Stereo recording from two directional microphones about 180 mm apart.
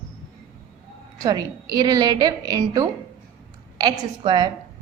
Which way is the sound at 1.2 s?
20° right (ahead or behind).